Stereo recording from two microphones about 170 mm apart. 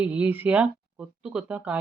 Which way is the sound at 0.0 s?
10° right (ahead or behind).